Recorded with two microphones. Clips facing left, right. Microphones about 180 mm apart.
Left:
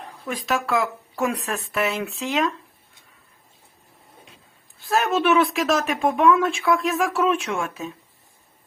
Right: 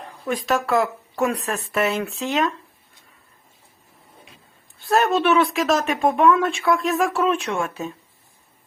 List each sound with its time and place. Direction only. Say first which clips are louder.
0.3 s speech: right 3 dB; centre (ahead or behind)
4.8 s speech: right 2 dB; centre (ahead or behind)